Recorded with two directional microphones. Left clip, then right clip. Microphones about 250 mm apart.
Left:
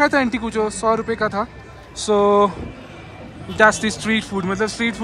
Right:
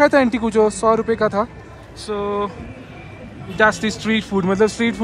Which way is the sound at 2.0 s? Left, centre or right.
Left.